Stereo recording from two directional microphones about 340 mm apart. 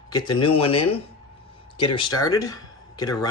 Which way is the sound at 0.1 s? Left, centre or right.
Centre.